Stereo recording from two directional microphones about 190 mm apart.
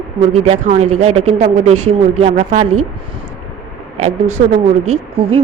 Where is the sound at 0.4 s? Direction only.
35° right (ahead or behind).